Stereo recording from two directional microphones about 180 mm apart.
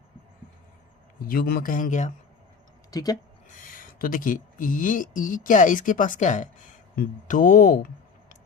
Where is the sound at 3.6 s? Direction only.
50° left (ahead or behind).